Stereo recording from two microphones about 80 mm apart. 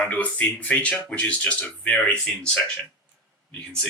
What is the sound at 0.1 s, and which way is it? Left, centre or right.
Speech, centre.